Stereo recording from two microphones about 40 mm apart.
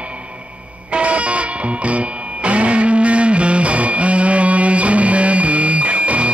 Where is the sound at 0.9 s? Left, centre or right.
Right.